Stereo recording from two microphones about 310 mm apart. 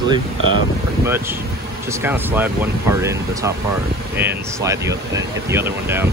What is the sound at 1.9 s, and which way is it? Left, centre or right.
Speech, centre.